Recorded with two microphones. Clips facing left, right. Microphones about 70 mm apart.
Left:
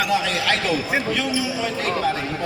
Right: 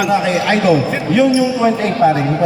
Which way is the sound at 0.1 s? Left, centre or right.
Right.